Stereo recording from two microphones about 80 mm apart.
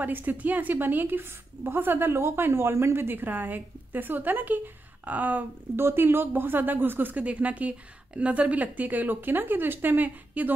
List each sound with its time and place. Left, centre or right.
0.0 s a woman's voice: right